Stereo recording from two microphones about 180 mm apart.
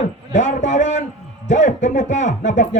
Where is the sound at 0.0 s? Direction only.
40° left (ahead or behind).